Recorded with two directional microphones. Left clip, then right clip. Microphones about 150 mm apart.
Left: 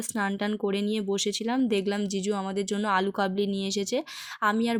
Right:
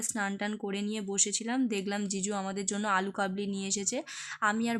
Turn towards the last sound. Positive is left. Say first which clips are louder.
# left 5 dB
turn(degrees=30)  # may be behind; listen again after turning